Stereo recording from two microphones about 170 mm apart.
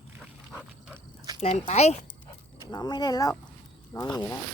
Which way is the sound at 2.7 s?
25° left (ahead or behind).